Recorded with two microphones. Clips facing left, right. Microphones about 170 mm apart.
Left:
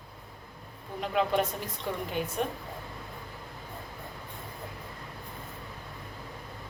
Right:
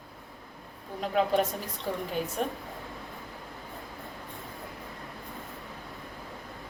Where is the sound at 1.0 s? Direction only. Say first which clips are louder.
Right 2 dB; 40° right (ahead or behind).